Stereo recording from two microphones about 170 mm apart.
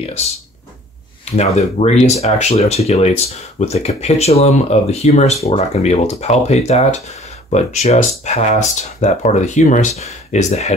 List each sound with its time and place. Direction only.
1.2 s speech: 40° left (ahead or behind)